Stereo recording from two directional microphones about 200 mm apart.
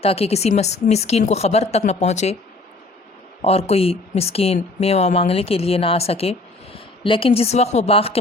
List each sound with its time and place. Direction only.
0.0 s a woman's voice: 30° left (ahead or behind)
3.4 s speech: 30° left (ahead or behind)